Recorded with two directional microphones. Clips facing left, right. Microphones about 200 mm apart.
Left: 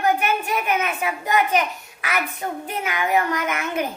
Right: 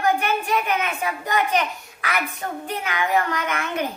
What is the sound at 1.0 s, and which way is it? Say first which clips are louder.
Speech: left 3 dB; 20° left (ahead or behind).